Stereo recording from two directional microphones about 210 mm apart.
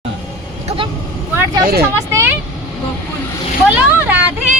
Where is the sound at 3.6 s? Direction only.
10° right (ahead or behind).